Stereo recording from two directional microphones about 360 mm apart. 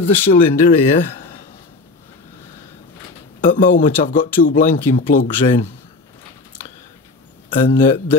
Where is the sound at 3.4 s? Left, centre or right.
Left.